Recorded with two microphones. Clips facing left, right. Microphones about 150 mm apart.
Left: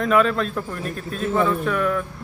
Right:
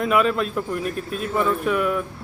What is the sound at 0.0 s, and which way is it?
Speech, 10° right (ahead or behind).